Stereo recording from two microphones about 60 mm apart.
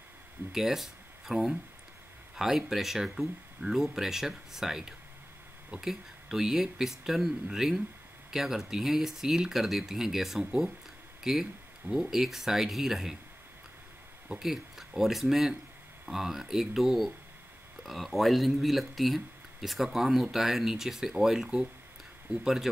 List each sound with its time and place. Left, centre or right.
0.5 s speech: centre
14.3 s speech: centre